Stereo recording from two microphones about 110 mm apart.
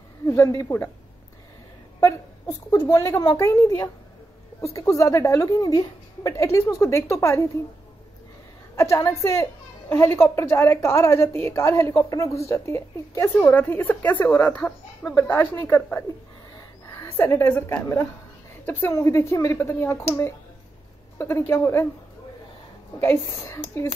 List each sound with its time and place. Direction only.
0.3 s a woman's voice: 30° left (ahead or behind)
2.0 s a woman's voice: 30° left (ahead or behind)
8.7 s a woman's voice: 30° left (ahead or behind)
21.2 s a woman's voice: 25° left (ahead or behind)
22.9 s a woman's voice: 20° left (ahead or behind)